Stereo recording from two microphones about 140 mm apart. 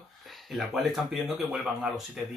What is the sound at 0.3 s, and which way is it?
Speech, centre (ahead or behind).